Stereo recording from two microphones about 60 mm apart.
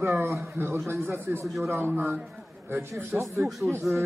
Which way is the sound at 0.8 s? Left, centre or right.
Right.